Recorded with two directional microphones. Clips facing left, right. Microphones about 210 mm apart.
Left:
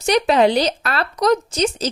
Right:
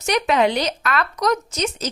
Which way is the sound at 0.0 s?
35° left (ahead or behind).